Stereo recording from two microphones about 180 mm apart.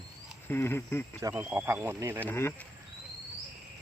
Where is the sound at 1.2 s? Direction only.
15° right (ahead or behind).